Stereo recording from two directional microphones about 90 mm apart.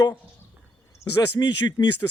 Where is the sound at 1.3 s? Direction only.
50° left (ahead or behind).